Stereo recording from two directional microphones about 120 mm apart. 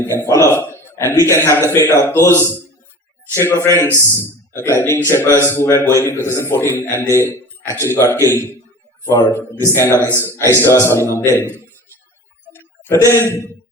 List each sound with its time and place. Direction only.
0.0 s a man's voice: 20° left (ahead or behind)
3.3 s a man's voice: 20° left (ahead or behind)
12.5 s a sound: 20° left (ahead or behind)